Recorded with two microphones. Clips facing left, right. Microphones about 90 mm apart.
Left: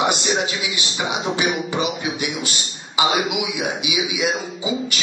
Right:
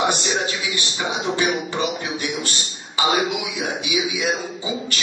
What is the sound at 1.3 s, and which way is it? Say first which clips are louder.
A man's voice: even; 15° left (ahead or behind).